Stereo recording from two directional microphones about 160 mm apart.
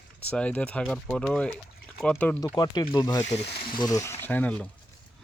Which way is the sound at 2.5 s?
25° left (ahead or behind).